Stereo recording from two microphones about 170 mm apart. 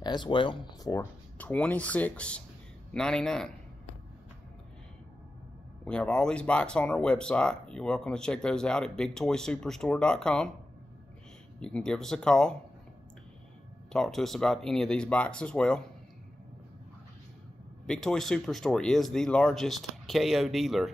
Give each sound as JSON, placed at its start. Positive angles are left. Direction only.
{"t": 0.0, "sound": "speech", "side_deg": 25}
{"t": 1.4, "sound": "speech", "side_deg": 10}
{"t": 5.9, "sound": "speech", "side_deg": 5}
{"t": 11.6, "sound": "speech", "side_deg": 5}
{"t": 13.9, "sound": "speech", "side_deg": 0}
{"t": 17.8, "sound": "speech", "side_deg": 0}